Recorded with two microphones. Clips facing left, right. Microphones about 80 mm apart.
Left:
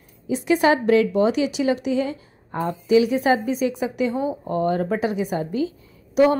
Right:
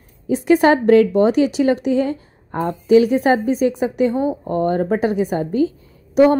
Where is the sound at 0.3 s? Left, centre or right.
Right.